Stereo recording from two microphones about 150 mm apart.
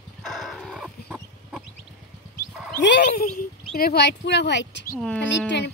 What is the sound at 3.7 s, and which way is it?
Speech, 90° left.